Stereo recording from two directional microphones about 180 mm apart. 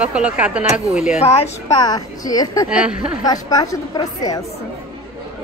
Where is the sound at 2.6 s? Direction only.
5° right (ahead or behind).